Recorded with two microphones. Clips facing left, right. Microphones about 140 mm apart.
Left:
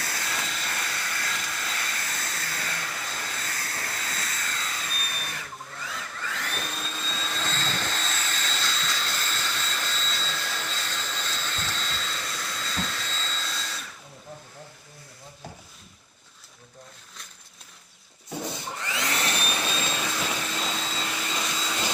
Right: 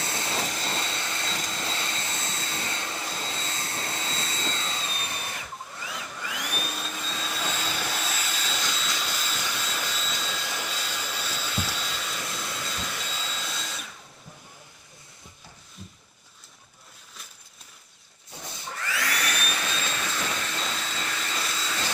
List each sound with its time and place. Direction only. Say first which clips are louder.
0.0 s vehicle: right 3 dB; 25° right (ahead or behind)
6.1 s vacuum cleaner: even; 15° right (ahead or behind)
18.7 s vacuum cleaner: right 3 dB; 20° left (ahead or behind)
20.0 s vacuum cleaner: left 1 dB; 10° left (ahead or behind)